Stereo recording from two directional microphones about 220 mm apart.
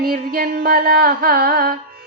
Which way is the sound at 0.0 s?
45° right (ahead or behind).